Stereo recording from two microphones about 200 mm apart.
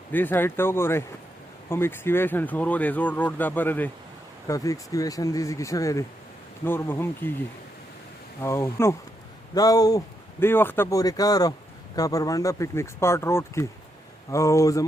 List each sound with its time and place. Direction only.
0.1 s speech: 10° left (ahead or behind)
8.4 s speech: 15° left (ahead or behind)